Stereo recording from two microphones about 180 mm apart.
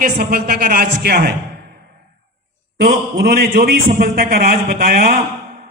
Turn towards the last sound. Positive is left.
turn(degrees=-55)  # may be behind; listen again after turning